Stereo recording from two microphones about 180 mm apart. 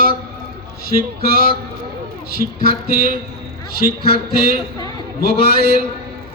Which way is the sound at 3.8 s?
60° left (ahead or behind).